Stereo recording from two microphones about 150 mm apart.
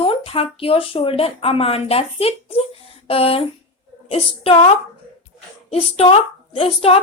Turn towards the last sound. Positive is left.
turn(degrees=40)  # may be behind; listen again after turning